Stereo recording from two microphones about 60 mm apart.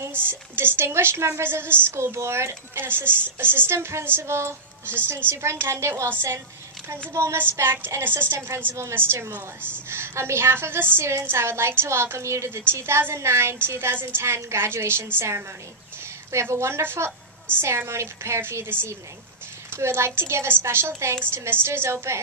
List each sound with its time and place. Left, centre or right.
0.0 s a woman's voice: right
7.2 s a woman's voice: right